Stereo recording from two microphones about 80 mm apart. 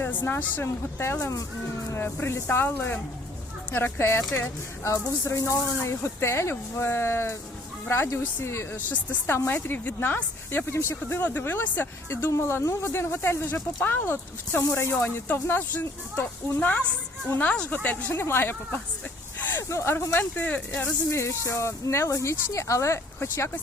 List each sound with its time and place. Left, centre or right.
0.0 s a sound: left
0.5 s speech: left
1.2 s speech: left; by 17.7 s centre
18.1 s speech: left
21.1 s speech: left